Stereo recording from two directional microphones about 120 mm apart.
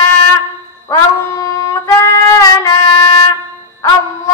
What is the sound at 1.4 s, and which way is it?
Music, 25° left (ahead or behind).